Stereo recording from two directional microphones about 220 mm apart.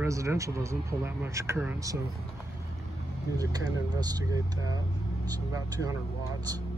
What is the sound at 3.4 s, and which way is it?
Speech, 15° right (ahead or behind).